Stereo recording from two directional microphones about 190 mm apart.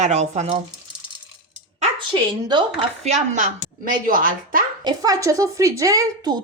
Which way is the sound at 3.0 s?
40° right (ahead or behind).